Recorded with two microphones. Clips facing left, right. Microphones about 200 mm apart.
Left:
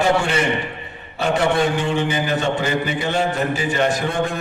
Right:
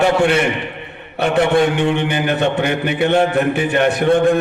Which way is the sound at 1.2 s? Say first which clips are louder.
Right 4 dB; 60° right (ahead or behind).